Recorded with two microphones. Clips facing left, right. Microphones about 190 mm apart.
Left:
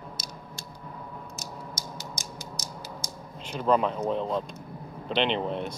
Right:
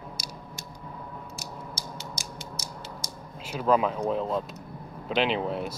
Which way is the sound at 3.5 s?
5° right (ahead or behind).